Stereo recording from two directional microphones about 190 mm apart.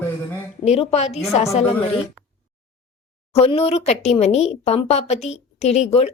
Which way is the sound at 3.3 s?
30° left (ahead or behind).